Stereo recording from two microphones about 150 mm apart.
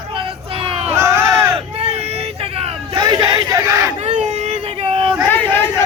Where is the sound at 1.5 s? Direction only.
40° right (ahead or behind); by 3.9 s 20° right (ahead or behind).